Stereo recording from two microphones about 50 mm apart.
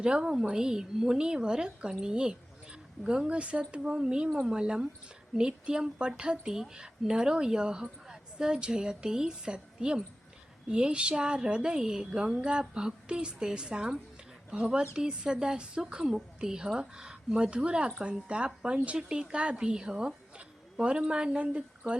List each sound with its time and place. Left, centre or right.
0.0 s a woman's voice: centre